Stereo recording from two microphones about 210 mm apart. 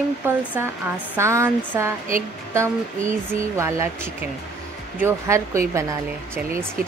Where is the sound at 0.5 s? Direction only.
10° right (ahead or behind).